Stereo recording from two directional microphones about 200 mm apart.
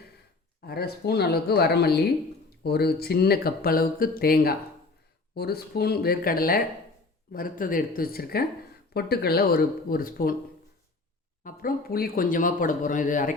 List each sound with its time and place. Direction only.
0.6 s speech: 50° left (ahead or behind)
11.4 s speech: 45° left (ahead or behind)